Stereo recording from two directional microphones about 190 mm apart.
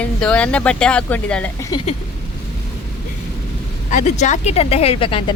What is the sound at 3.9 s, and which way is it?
Speech, 40° left (ahead or behind).